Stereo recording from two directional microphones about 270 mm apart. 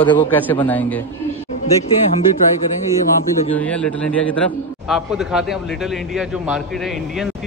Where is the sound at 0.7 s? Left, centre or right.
Centre.